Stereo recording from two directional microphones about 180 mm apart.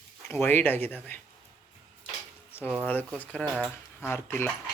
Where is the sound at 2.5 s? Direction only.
10° left (ahead or behind).